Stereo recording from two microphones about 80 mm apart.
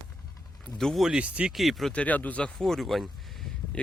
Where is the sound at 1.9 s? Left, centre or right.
Centre.